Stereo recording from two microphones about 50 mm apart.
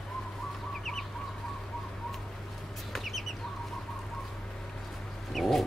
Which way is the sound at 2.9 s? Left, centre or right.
Centre.